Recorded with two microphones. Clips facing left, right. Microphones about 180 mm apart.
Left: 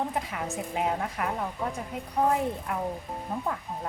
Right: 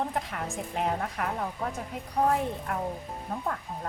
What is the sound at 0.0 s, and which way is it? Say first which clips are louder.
A woman's voice: left 1 dB; centre (ahead or behind).